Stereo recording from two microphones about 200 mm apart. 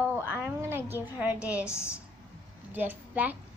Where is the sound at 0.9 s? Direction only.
10° right (ahead or behind).